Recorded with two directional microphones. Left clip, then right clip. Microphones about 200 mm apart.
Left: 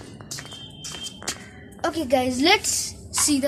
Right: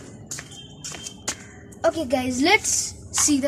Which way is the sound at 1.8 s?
10° left (ahead or behind).